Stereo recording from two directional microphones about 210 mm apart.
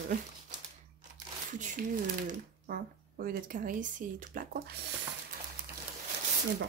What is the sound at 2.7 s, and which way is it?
A woman's voice, 45° right (ahead or behind).